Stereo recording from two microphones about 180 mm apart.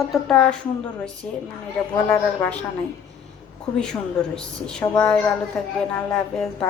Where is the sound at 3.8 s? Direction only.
5° left (ahead or behind).